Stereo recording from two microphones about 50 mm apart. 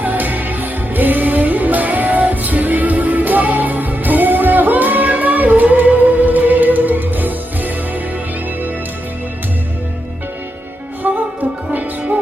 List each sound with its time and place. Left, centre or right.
0.0 s music: right
11.0 s music: right